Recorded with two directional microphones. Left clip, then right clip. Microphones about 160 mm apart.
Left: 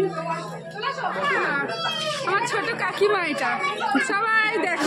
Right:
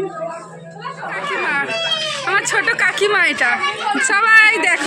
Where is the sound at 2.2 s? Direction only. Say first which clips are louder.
Right 8 dB; centre (ahead or behind).